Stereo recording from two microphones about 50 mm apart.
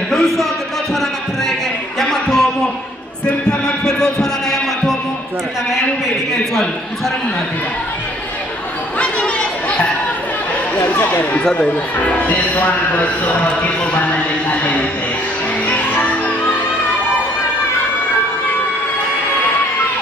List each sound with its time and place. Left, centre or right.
0.1 s a sound: centre
2.0 s a sound: centre
3.4 s music: centre
8.9 s chatter: left
11.1 s a man's voice: left
15.6 s music: left